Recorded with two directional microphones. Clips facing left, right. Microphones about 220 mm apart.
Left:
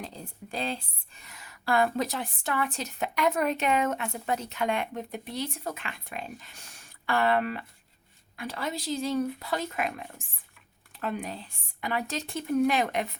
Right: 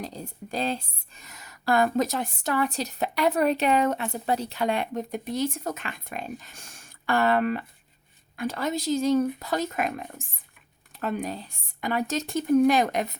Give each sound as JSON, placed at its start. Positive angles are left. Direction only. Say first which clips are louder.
{"t": 0.5, "sound": "speech", "louder": "right 4 dB", "side_deg": -40}